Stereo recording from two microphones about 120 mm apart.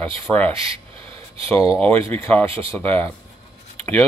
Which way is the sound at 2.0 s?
20° left (ahead or behind).